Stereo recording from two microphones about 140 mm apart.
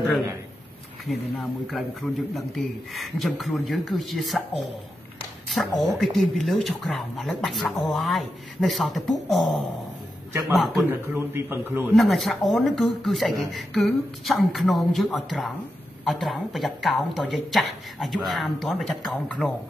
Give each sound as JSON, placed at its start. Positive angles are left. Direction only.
{"t": 1.7, "sound": "speech", "side_deg": 0}
{"t": 10.9, "sound": "a man's voice", "side_deg": -15}
{"t": 11.9, "sound": "speech", "side_deg": 0}